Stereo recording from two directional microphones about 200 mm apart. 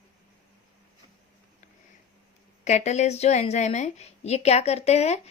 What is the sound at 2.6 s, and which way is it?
A woman's voice, 35° left (ahead or behind).